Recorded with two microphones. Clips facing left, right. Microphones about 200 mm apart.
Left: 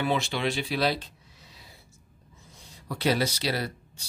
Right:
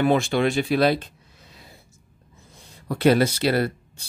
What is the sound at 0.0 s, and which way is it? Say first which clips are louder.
Speech: right 8 dB; 50° right (ahead or behind).